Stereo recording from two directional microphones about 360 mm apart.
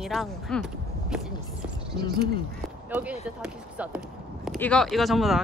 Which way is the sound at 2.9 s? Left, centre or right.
Centre.